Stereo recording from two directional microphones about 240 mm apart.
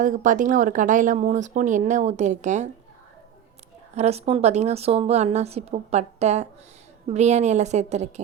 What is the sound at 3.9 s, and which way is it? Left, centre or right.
A woman's voice, right.